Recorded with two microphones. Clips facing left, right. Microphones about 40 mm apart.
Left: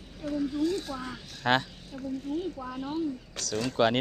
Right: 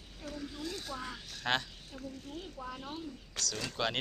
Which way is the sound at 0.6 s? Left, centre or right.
Centre.